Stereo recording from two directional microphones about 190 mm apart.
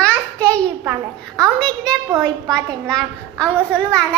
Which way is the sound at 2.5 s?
5° left (ahead or behind).